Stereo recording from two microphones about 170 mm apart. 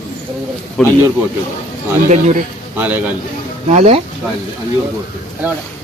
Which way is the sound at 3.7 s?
40° right (ahead or behind).